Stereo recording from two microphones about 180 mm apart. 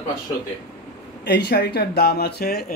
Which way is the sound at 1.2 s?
65° left (ahead or behind).